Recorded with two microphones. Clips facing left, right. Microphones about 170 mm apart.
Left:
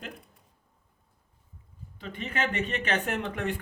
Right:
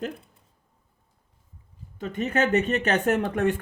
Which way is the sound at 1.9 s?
45° right (ahead or behind).